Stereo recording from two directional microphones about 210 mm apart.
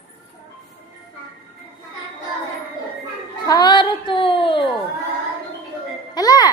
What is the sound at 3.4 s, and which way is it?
A woman's voice, 20° left (ahead or behind).